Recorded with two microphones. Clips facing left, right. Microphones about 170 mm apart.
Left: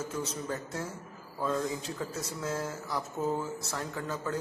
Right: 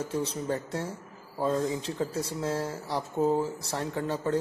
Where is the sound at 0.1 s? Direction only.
30° right (ahead or behind).